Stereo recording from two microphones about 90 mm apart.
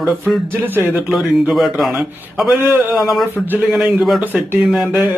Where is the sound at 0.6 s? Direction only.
20° right (ahead or behind).